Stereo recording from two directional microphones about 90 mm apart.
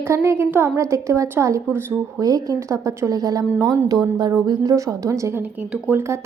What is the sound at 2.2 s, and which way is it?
A woman's voice, 40° right (ahead or behind).